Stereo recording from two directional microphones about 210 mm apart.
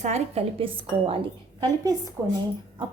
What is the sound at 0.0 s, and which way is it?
Speech, 30° right (ahead or behind).